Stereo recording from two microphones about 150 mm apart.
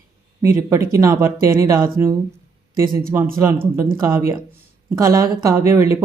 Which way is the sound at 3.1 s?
15° right (ahead or behind).